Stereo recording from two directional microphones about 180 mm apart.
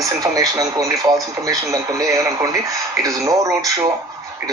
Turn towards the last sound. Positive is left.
turn(degrees=-20)  # may be behind; listen again after turning